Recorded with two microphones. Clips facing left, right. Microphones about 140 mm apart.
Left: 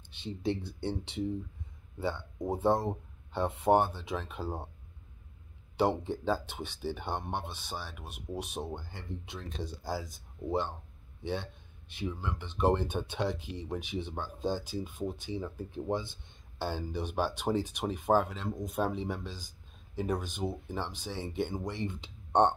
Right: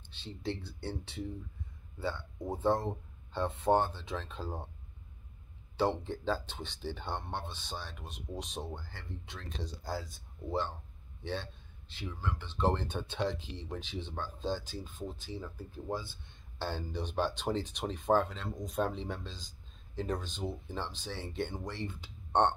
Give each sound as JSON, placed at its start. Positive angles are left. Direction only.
{"t": 0.1, "sound": "speech", "side_deg": 15}
{"t": 5.8, "sound": "speech", "side_deg": 15}
{"t": 11.9, "sound": "speech", "side_deg": 15}